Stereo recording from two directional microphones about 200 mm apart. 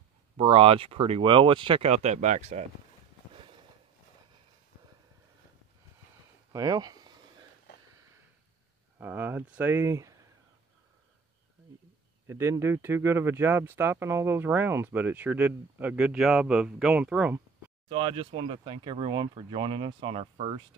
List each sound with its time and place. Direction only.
0.4 s speech: 25° right (ahead or behind)
6.5 s a sound: 20° right (ahead or behind)
8.9 s speech: 10° right (ahead or behind)
12.3 s speech: 15° right (ahead or behind)
17.8 s speech: 25° right (ahead or behind)